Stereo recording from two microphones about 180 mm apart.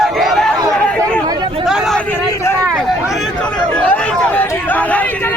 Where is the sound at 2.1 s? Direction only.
15° left (ahead or behind).